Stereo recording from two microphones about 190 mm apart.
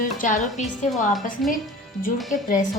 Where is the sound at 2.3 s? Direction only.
40° left (ahead or behind).